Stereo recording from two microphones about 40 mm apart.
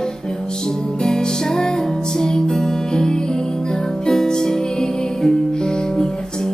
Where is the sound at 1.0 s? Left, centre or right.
Centre.